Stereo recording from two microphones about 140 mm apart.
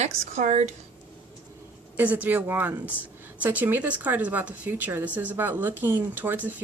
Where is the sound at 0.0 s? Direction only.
55° right (ahead or behind).